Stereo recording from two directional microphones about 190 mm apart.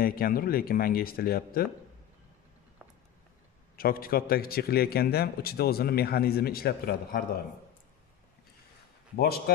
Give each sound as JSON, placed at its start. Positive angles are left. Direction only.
{"t": 0.0, "sound": "a man's voice", "side_deg": 50}
{"t": 3.7, "sound": "a man's voice", "side_deg": 50}
{"t": 9.1, "sound": "a man's voice", "side_deg": 55}